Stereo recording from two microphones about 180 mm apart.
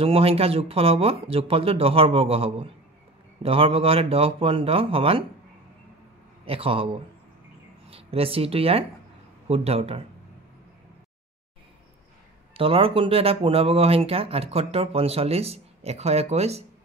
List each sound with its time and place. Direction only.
0.0 s speech: 35° right (ahead or behind)
6.4 s speech: 30° right (ahead or behind)
12.5 s speech: 30° right (ahead or behind)